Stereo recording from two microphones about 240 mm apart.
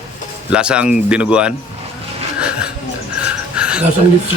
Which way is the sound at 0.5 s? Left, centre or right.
Centre.